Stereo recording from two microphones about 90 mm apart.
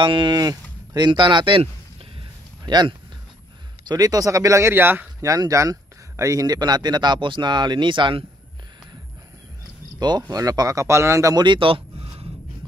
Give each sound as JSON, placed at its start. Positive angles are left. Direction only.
{"t": 0.0, "sound": "speech", "side_deg": -60}
{"t": 2.6, "sound": "speech", "side_deg": -55}
{"t": 5.2, "sound": "speech", "side_deg": -40}
{"t": 9.9, "sound": "speech", "side_deg": -50}
{"t": 11.3, "sound": "a sound", "side_deg": -60}